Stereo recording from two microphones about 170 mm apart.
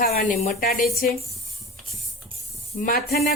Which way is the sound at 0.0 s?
60° left (ahead or behind).